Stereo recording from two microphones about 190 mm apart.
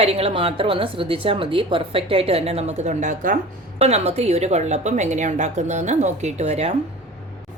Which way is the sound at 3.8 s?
35° right (ahead or behind).